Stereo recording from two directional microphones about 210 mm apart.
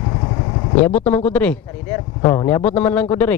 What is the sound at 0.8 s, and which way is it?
Speech, 10° left (ahead or behind).